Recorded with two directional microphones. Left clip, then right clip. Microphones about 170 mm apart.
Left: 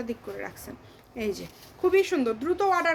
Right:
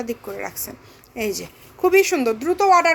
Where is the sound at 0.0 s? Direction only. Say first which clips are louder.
Right 6 dB; 30° right (ahead or behind).